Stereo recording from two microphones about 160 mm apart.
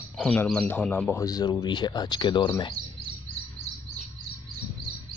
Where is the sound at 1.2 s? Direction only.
25° left (ahead or behind).